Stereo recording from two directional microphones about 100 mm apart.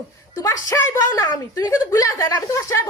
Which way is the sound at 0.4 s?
30° left (ahead or behind).